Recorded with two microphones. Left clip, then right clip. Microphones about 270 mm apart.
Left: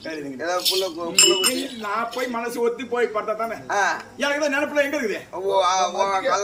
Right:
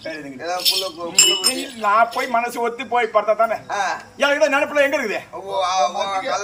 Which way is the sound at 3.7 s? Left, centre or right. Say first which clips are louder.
Left 1 dB; centre.